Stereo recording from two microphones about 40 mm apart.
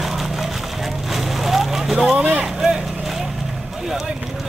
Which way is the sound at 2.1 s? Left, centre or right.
Right.